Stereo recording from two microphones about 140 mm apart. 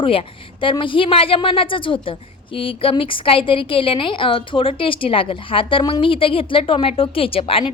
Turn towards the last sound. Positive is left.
turn(degrees=40)  # may be behind; listen again after turning